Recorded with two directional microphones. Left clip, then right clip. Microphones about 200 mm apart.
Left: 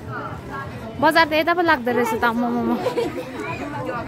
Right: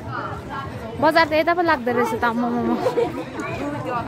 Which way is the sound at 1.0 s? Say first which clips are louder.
Even; 10° left (ahead or behind).